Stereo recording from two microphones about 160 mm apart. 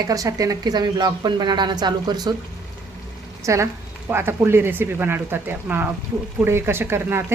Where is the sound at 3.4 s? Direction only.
15° right (ahead or behind).